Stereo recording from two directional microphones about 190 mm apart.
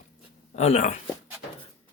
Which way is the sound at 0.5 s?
35° left (ahead or behind).